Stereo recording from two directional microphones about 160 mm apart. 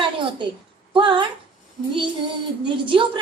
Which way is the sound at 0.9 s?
30° right (ahead or behind).